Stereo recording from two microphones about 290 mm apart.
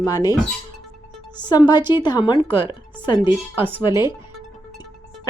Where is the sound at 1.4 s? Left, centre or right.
Centre.